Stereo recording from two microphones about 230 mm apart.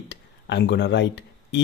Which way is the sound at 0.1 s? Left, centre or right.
Left.